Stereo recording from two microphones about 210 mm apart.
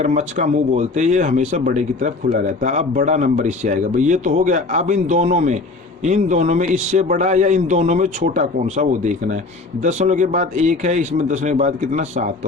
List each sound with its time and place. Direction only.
0.0 s speech: 35° right (ahead or behind)